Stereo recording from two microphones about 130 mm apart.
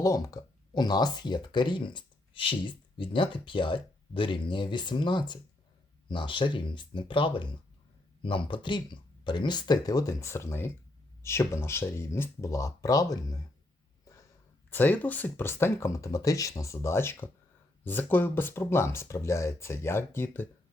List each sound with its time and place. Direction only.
0.0 s speech: 30° left (ahead or behind)
14.0 s a sound: 25° left (ahead or behind)
14.7 s speech: 15° left (ahead or behind)